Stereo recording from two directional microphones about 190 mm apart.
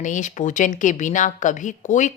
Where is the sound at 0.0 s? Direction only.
40° left (ahead or behind).